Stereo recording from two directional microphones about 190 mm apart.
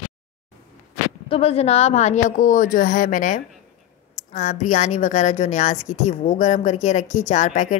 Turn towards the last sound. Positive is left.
turn(degrees=40)  # may be behind; listen again after turning